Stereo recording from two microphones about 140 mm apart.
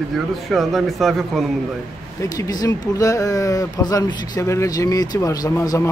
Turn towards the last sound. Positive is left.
turn(degrees=25)  # may be behind; listen again after turning